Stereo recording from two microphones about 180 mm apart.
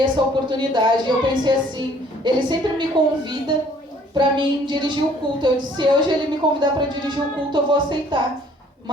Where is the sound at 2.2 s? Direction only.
25° right (ahead or behind).